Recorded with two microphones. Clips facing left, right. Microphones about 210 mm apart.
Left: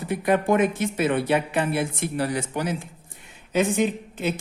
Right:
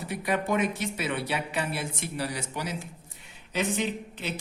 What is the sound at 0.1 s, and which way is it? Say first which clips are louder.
Speech: left 7 dB; 50° left (ahead or behind).